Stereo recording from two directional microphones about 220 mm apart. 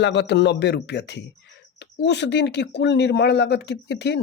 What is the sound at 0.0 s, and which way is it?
Speech, 55° left (ahead or behind).